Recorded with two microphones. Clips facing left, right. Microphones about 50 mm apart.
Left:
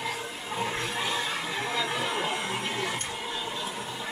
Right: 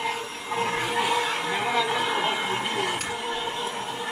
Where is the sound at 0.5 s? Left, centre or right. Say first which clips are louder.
Right 6 dB; right.